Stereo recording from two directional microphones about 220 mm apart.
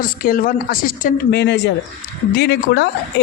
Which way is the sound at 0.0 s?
40° left (ahead or behind).